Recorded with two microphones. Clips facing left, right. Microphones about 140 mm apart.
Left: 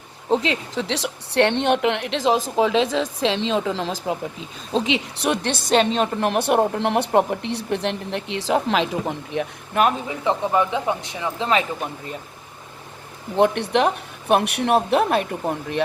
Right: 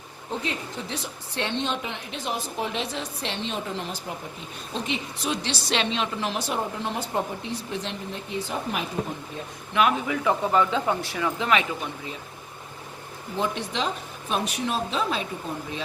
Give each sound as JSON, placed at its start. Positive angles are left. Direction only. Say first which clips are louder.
{"t": 0.3, "sound": "a woman's voice", "louder": "left 10 dB", "side_deg": 90}
{"t": 9.7, "sound": "a man's voice", "louder": "left 3 dB", "side_deg": 45}
{"t": 10.1, "sound": "speech", "louder": "left 2 dB", "side_deg": 20}
{"t": 13.3, "sound": "speech", "louder": "left 10 dB", "side_deg": 65}